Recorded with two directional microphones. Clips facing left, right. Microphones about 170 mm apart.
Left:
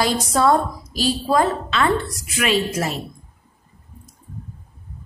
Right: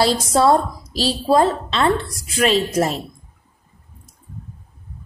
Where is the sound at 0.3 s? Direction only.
30° right (ahead or behind).